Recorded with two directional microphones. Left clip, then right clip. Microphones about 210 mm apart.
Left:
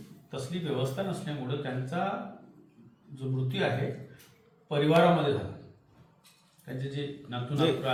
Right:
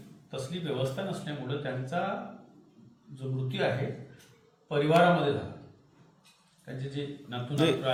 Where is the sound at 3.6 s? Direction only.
15° right (ahead or behind).